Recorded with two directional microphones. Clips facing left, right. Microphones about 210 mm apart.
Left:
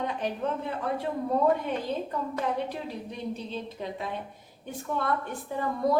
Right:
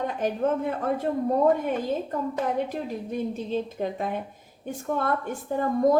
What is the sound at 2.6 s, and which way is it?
A woman's voice, 45° right (ahead or behind).